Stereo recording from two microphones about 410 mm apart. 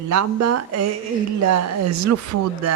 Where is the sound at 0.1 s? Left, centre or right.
Right.